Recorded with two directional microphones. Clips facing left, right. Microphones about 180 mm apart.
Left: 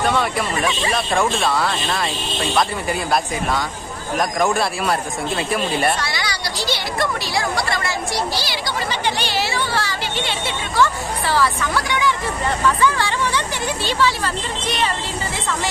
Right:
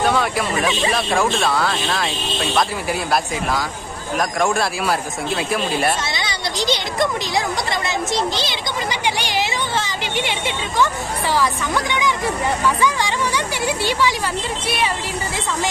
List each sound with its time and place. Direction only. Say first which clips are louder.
0.0 s speech: right 1 dB; centre (ahead or behind)
6.1 s speech: right 1 dB; 20° right (ahead or behind)